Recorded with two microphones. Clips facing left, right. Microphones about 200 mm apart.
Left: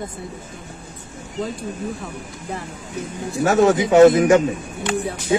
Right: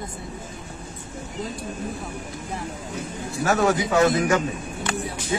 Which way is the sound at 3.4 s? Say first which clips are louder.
Left 5 dB; 25° left (ahead or behind).